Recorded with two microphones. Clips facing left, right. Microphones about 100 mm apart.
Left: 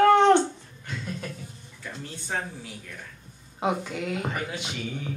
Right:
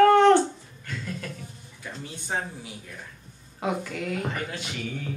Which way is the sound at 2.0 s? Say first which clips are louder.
Right 1 dB; 15° right (ahead or behind).